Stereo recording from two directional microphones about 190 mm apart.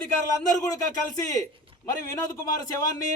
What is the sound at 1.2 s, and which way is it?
A man's voice, 20° left (ahead or behind).